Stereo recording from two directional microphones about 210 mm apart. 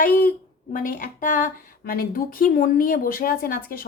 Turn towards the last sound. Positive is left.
turn(degrees=40)  # may be behind; listen again after turning